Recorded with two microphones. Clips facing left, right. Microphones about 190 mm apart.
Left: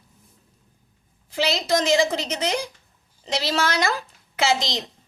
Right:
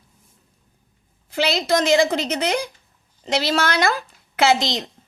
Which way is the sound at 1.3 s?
60° right (ahead or behind).